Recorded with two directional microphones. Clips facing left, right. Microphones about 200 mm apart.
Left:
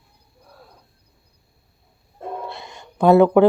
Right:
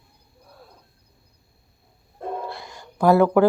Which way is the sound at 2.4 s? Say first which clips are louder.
Even; 25° left (ahead or behind).